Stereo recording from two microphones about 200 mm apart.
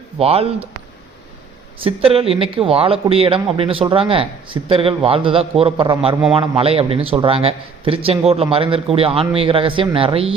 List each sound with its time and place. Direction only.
0.2 s a man's voice: 30° right (ahead or behind)
1.8 s a man's voice: 30° right (ahead or behind)